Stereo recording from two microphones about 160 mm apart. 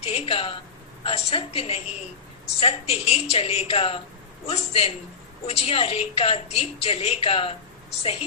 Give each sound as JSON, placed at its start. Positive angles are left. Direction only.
{"t": 0.0, "sound": "a woman's voice", "side_deg": 40}